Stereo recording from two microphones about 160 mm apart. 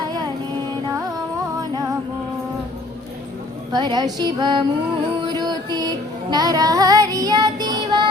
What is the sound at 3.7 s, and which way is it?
Speech, 25° right (ahead or behind).